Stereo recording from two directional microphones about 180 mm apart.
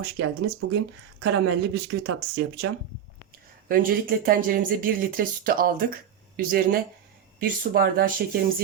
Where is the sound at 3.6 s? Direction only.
50° right (ahead or behind).